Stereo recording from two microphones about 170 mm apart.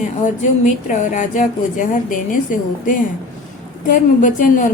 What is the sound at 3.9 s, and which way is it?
Speech, 50° left (ahead or behind).